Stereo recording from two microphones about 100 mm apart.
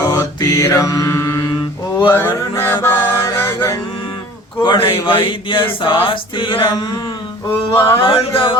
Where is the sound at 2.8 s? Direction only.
25° left (ahead or behind).